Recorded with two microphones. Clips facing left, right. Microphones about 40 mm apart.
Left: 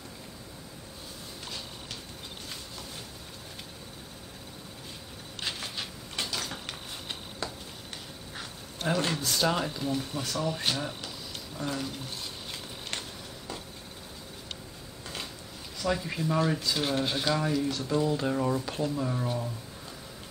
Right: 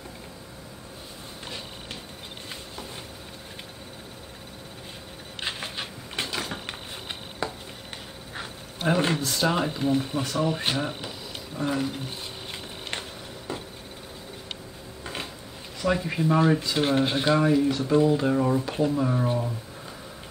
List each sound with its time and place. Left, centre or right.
5.4 s a sound: right
9.2 s speech: centre
13.5 s vehicle: right
15.8 s speech: centre